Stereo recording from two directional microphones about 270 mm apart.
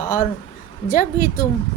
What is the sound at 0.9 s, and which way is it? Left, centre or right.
Speech, left.